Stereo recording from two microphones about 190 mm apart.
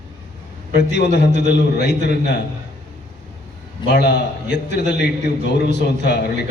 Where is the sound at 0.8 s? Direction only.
65° left (ahead or behind).